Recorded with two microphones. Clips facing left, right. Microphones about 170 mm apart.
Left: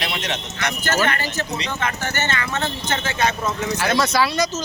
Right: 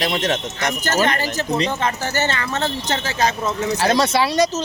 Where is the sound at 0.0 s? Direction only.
45° right (ahead or behind).